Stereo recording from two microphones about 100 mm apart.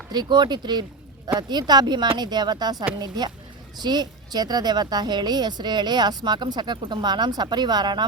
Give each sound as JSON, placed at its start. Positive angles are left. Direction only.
{"t": 0.1, "sound": "a woman's voice", "side_deg": -45}